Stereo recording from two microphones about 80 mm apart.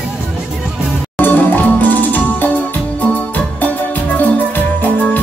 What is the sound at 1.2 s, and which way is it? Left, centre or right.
Music, left.